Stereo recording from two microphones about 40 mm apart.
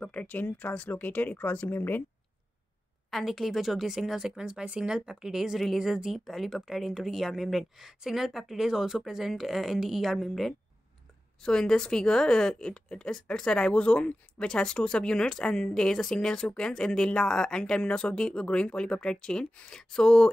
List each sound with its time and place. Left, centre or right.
0.1 s speech: left
3.1 s a woman's voice: centre
4.5 s speech: right; by 10.5 s centre
11.4 s speech: centre
13.7 s speech: left